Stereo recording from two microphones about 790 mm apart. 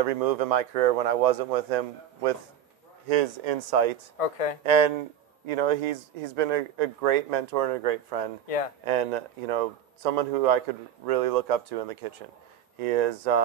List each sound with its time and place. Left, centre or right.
0.0 s speech: right
4.2 s speech: left
4.6 s speech: right
8.5 s a man's voice: left
8.8 s speech: right